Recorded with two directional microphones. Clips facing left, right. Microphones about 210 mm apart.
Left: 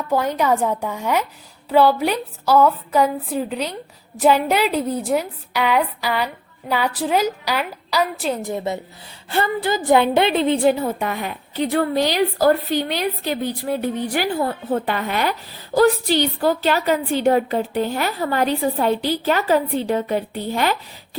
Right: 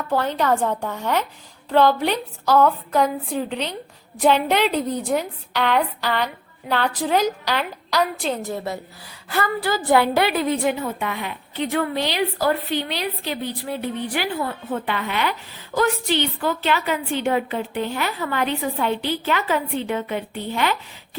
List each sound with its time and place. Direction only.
0.1 s a woman's voice: 10° left (ahead or behind); by 20.7 s 40° left (ahead or behind)